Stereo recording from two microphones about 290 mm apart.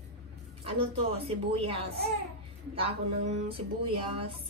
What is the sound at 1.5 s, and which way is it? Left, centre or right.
Speech, centre.